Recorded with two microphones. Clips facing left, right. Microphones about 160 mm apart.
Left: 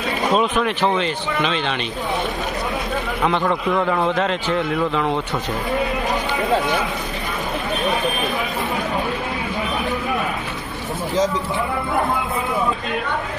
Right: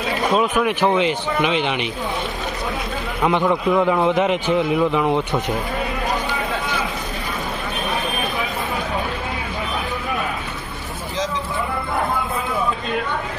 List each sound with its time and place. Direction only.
0.3 s a man's voice: 5° right (ahead or behind)
3.3 s a man's voice: 15° right (ahead or behind)